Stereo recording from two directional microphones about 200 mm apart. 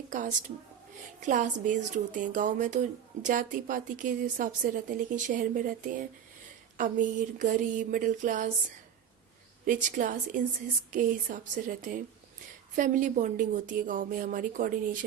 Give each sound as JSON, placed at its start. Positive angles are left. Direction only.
{"t": 0.1, "sound": "a woman's voice", "side_deg": -40}
{"t": 9.6, "sound": "a woman's voice", "side_deg": -40}